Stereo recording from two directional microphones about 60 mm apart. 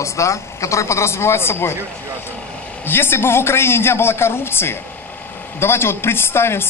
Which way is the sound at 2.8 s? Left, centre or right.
Left.